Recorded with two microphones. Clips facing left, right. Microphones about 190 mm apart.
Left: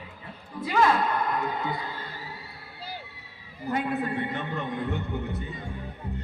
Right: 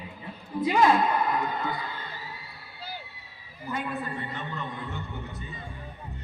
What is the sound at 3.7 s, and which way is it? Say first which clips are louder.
A man's voice: left 5 dB; 60° left (ahead or behind).